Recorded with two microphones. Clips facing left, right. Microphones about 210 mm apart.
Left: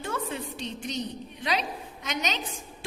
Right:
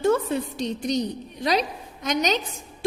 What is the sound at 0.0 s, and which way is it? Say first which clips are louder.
A woman's voice: right 11 dB; 40° right (ahead or behind).